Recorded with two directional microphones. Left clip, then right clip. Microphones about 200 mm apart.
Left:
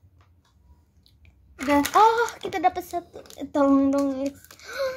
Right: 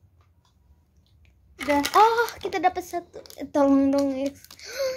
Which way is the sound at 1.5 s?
15° right (ahead or behind).